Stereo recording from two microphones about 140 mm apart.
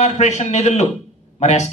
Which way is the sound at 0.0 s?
55° left (ahead or behind).